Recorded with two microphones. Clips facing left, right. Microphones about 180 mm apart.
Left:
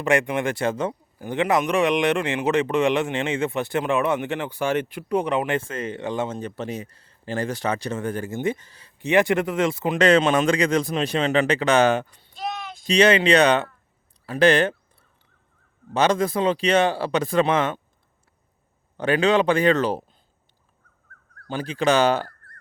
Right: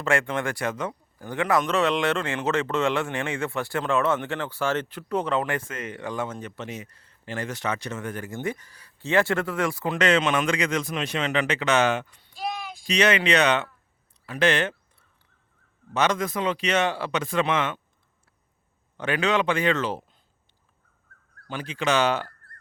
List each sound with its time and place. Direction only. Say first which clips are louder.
0.0 s speech: left 4 dB; 15° left (ahead or behind)
10.0 s speech: left 5 dB; 35° left (ahead or behind)
14.3 s a sound: left 5 dB; 35° left (ahead or behind)
15.9 s speech: left 4 dB; 30° left (ahead or behind)
18.9 s speech: left 5 dB; 35° left (ahead or behind)
21.4 s speech: left 5 dB; 35° left (ahead or behind)